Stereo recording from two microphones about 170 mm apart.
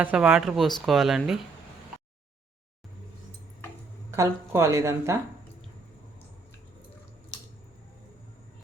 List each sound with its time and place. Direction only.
0.0 s speech: 10° right (ahead or behind)
4.1 s a woman's voice: 15° right (ahead or behind)